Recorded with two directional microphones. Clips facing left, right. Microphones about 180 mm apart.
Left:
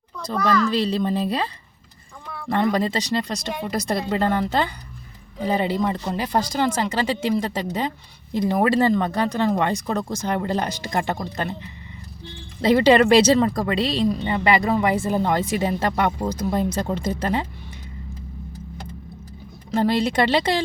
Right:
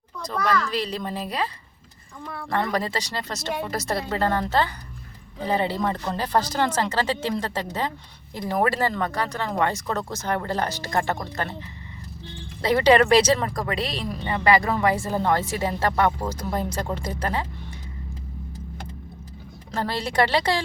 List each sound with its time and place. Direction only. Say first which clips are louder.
0.3 s speech: left 4 dB; 25° left (ahead or behind)
2.5 s speech: left 5 dB; 20° left (ahead or behind)
12.6 s speech: left 3 dB; 25° left (ahead or behind)
19.7 s speech: left 5 dB; 20° left (ahead or behind)